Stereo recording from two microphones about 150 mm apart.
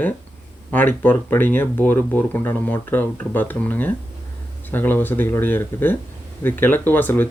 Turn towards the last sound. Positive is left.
turn(degrees=10)  # may be behind; listen again after turning